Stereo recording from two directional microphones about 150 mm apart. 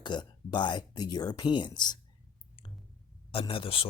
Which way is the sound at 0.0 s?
30° left (ahead or behind).